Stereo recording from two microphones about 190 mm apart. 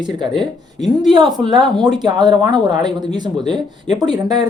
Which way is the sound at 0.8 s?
Centre (ahead or behind).